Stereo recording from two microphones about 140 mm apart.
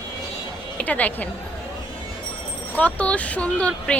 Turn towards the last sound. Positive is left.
turn(degrees=10)  # may be behind; listen again after turning